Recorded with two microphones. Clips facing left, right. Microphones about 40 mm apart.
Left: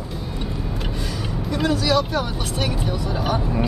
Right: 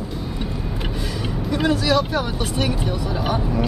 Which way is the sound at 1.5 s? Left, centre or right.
Centre.